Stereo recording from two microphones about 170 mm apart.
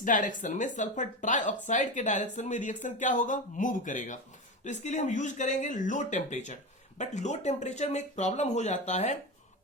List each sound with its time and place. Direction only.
0.0 s speech: 50° left (ahead or behind)